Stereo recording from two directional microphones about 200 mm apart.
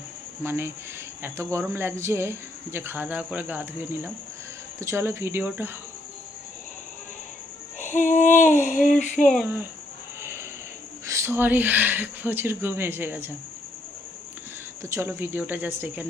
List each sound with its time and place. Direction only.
0.4 s speech: 10° right (ahead or behind)
7.8 s a sound: 40° left (ahead or behind)
9.2 s speech: centre (ahead or behind)
11.0 s speech: 15° right (ahead or behind)
14.8 s speech: 10° right (ahead or behind)